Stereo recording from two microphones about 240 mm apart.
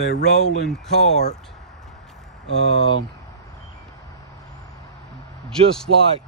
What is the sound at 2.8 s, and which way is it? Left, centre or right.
Speech, right.